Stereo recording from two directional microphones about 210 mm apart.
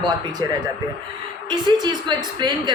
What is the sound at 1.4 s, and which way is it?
A woman's voice, 20° right (ahead or behind).